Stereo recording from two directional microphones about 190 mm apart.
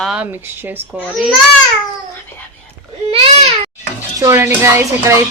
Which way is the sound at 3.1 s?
30° right (ahead or behind).